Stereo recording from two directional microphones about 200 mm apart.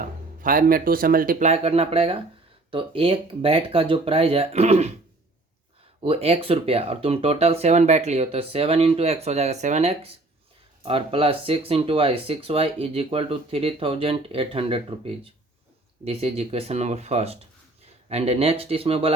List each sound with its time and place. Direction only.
0.0 s speech: 45° right (ahead or behind)
6.0 s speech: 30° right (ahead or behind)